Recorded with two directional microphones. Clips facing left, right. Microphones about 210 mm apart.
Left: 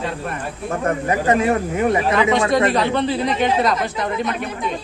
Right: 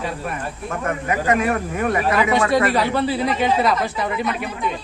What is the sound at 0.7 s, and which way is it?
Speech, 35° left (ahead or behind).